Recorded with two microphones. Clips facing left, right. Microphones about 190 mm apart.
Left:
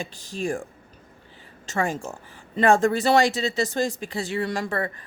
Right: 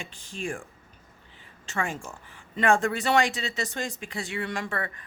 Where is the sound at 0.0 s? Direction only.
40° left (ahead or behind).